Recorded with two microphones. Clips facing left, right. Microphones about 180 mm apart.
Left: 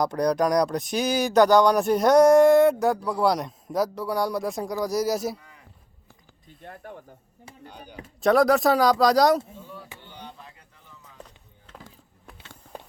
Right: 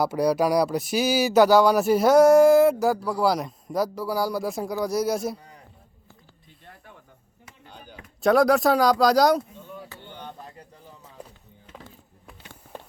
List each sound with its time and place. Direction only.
0.0 s speech: 5° right (ahead or behind)
5.4 s a sound: 35° right (ahead or behind)
6.7 s speech: 50° left (ahead or behind)
8.2 s speech: centre (ahead or behind)
10.1 s a sound: 50° right (ahead or behind)
11.2 s music: 10° right (ahead or behind)